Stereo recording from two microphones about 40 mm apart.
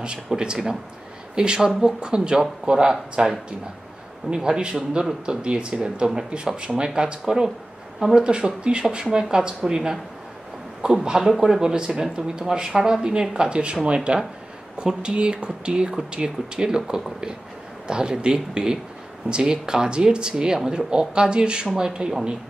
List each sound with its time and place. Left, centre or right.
0.4 s speech: centre
11.7 s speech: right